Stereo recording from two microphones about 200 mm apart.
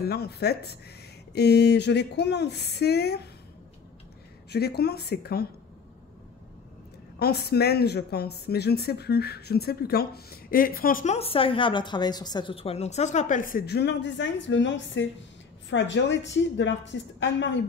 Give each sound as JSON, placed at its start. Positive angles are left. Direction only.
{"t": 0.0, "sound": "a woman's voice", "side_deg": 55}
{"t": 4.5, "sound": "a woman's voice", "side_deg": 50}
{"t": 7.2, "sound": "a woman's voice", "side_deg": 50}
{"t": 11.1, "sound": "a woman's voice", "side_deg": 30}